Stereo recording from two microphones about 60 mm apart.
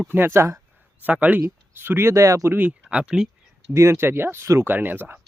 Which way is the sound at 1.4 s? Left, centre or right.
Right.